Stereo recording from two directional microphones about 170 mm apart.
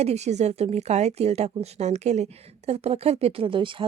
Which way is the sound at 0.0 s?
40° right (ahead or behind).